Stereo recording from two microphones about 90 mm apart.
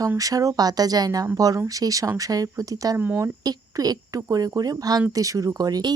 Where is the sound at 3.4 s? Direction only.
45° right (ahead or behind).